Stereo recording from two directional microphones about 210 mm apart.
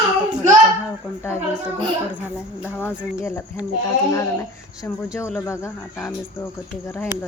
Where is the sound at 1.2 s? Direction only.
10° left (ahead or behind).